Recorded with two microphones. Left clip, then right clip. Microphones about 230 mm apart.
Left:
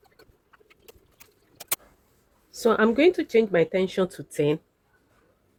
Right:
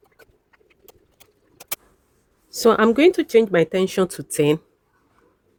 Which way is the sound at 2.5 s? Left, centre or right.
Right.